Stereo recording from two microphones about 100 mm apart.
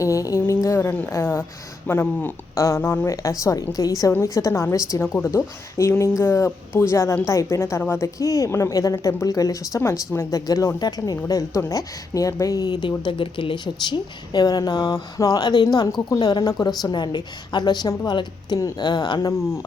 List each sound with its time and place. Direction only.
0.0 s a sound: 35° left (ahead or behind)
1.1 s a woman's voice: 25° left (ahead or behind); by 12.9 s 45° left (ahead or behind)
13.1 s speech: 60° left (ahead or behind)